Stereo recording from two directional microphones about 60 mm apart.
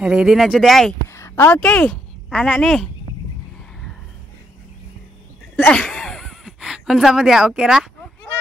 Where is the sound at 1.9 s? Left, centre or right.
Centre.